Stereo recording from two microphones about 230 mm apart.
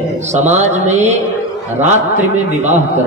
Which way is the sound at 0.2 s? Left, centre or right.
Right.